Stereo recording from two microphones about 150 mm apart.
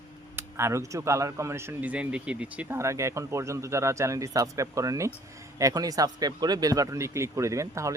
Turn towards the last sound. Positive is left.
turn(degrees=-20)  # may be behind; listen again after turning